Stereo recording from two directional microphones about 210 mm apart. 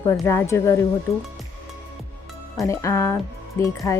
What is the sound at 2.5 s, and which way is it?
A woman's voice, 15° left (ahead or behind).